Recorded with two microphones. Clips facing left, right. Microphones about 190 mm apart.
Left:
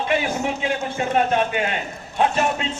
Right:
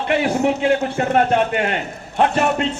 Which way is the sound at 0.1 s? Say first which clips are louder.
Right 7 dB; 65° right (ahead or behind).